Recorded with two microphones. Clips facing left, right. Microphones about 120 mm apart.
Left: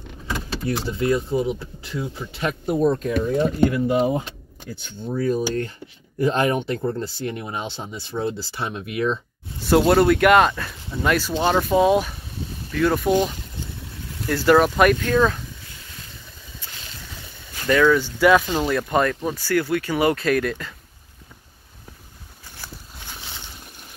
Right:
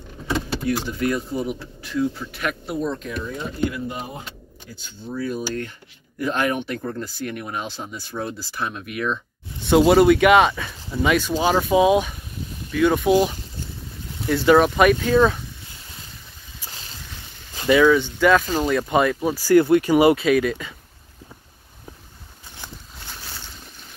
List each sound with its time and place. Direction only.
0.7 s speech: 25° left (ahead or behind)
2.6 s speech: 45° left (ahead or behind)
5.3 s speech: 35° left (ahead or behind)
9.7 s speech: centre (ahead or behind)
14.2 s speech: centre (ahead or behind)
17.6 s speech: 10° right (ahead or behind)
18.2 s speech: 5° left (ahead or behind)
19.5 s speech: 25° right (ahead or behind)
20.2 s speech: centre (ahead or behind)
22.6 s walk: 5° left (ahead or behind)